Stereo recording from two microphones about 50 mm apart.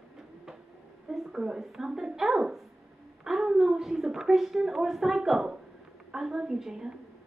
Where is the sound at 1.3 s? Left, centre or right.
Centre.